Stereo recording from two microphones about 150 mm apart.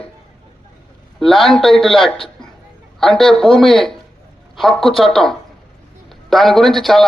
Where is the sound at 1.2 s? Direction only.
Centre (ahead or behind).